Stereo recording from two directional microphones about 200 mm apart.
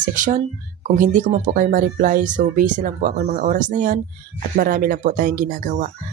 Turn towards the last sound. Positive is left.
turn(degrees=-45)  # may be behind; listen again after turning